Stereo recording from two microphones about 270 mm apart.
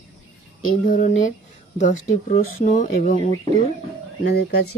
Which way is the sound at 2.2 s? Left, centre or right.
Left.